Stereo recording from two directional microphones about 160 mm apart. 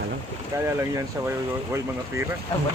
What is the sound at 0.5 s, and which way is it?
Speech, 20° right (ahead or behind).